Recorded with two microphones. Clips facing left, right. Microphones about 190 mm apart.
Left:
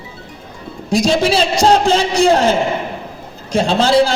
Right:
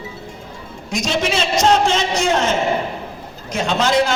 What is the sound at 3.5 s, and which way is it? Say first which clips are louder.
Speech: left 5 dB; 30° left (ahead or behind).